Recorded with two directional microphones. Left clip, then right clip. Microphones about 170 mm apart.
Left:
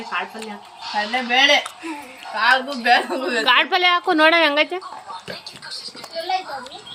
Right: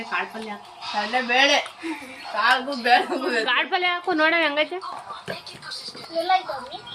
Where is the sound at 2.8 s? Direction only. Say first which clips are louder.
Left 2 dB; 35° left (ahead or behind).